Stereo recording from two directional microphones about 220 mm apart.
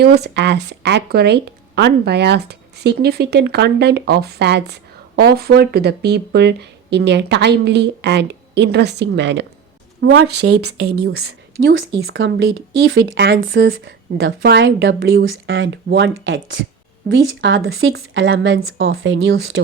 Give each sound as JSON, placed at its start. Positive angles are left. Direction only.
{"t": 0.0, "sound": "speech", "side_deg": -45}
{"t": 10.4, "sound": "speech", "side_deg": -85}